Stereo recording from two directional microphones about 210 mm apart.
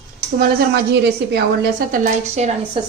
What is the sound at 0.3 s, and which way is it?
A woman's voice, 50° right (ahead or behind).